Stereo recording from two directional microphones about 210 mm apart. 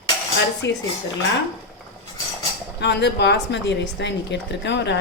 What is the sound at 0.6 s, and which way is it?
Speech, 55° left (ahead or behind).